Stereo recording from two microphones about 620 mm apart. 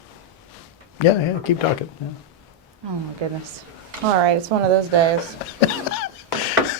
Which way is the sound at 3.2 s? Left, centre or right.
Right.